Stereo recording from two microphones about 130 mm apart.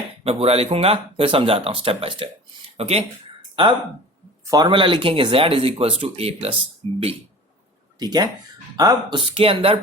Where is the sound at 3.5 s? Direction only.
40° right (ahead or behind).